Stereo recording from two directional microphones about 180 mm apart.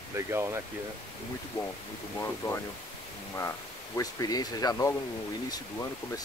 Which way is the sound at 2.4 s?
20° left (ahead or behind).